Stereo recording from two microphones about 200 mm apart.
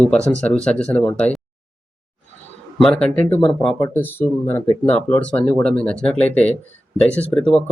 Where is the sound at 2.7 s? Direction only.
5° left (ahead or behind).